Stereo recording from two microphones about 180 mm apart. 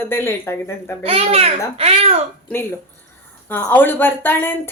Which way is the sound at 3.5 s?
10° left (ahead or behind).